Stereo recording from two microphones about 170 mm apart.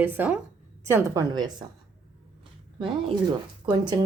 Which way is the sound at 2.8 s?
25° right (ahead or behind).